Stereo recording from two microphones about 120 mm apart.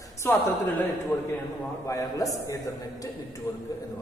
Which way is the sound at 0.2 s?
20° left (ahead or behind).